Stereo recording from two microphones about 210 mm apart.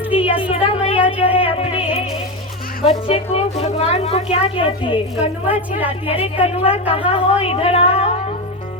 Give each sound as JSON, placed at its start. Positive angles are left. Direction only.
{"t": 0.2, "sound": "a sound", "side_deg": 25}
{"t": 1.4, "sound": "music", "side_deg": 25}
{"t": 2.8, "sound": "a woman's voice", "side_deg": 30}
{"t": 6.2, "sound": "a woman's voice", "side_deg": 25}